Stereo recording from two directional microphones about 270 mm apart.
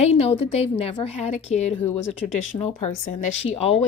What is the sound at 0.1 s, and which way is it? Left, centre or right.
A woman's voice, left.